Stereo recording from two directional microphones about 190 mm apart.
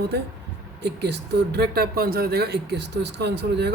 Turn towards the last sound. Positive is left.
turn(degrees=-60)  # may be behind; listen again after turning